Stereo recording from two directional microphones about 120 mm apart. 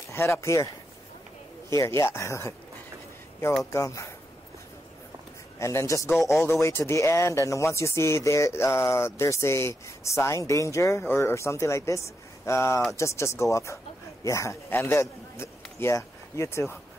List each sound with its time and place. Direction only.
0.1 s speech: 25° left (ahead or behind)
1.7 s speech: 25° left (ahead or behind)
3.7 s speech: 25° left (ahead or behind)
5.6 s speech: 25° left (ahead or behind)
6.1 s speech: centre (ahead or behind)
6.4 s a man's voice: 20° left (ahead or behind)